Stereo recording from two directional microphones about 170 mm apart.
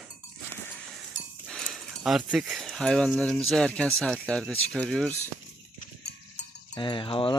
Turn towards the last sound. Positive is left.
turn(degrees=30)  # may be behind; listen again after turning